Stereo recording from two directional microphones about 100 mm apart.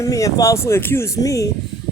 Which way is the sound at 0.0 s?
35° left (ahead or behind).